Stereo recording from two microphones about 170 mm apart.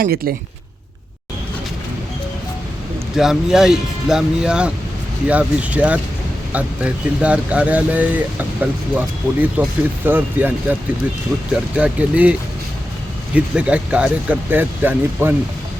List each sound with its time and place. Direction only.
0.0 s speech: 60° right (ahead or behind)
3.2 s speech: 5° right (ahead or behind)